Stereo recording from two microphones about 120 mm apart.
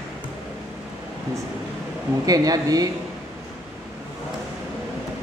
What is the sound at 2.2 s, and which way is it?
Speech, 30° right (ahead or behind).